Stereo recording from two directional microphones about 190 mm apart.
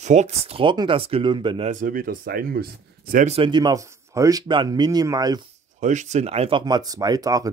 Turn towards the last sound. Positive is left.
turn(degrees=-20)  # may be behind; listen again after turning